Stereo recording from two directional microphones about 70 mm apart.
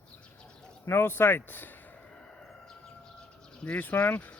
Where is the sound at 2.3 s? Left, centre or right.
Centre.